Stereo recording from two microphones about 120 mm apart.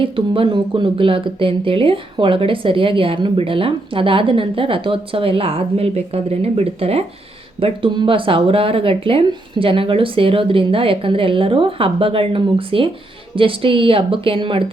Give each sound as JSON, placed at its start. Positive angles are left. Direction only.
{"t": 0.0, "sound": "speech", "side_deg": -50}
{"t": 7.6, "sound": "speech", "side_deg": -45}